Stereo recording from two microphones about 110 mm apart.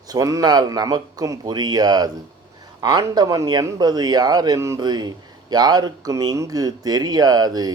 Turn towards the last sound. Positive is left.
turn(degrees=-35)  # may be behind; listen again after turning